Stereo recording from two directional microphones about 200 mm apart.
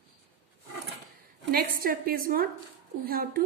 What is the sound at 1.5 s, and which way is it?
A woman's voice, 45° right (ahead or behind).